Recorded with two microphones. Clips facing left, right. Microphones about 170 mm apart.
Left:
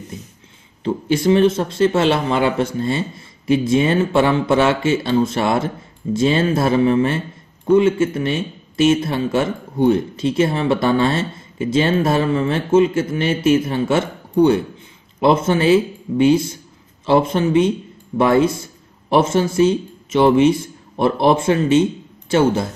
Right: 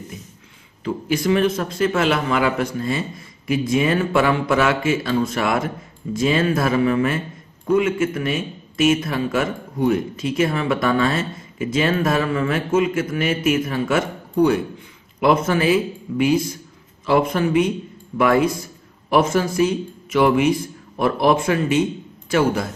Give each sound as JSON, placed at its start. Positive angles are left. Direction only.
{"t": 0.8, "sound": "speech", "side_deg": 30}
{"t": 15.1, "sound": "a man's voice", "side_deg": 25}